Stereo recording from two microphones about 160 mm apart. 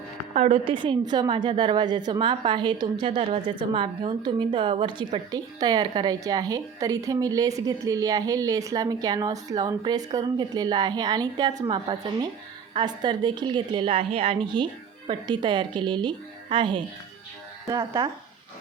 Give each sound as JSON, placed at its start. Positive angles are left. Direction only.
{"t": 0.3, "sound": "a woman's voice", "side_deg": -50}
{"t": 0.6, "sound": "a woman's voice", "side_deg": -30}